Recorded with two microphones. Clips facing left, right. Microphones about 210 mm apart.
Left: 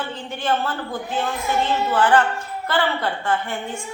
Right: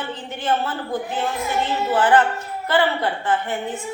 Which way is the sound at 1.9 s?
20° right (ahead or behind).